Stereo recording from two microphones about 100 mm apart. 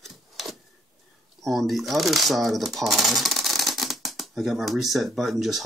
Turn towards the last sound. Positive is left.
turn(degrees=0)  # may be behind; listen again after turning